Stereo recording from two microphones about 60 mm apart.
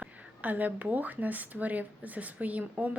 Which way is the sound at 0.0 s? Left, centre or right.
Right.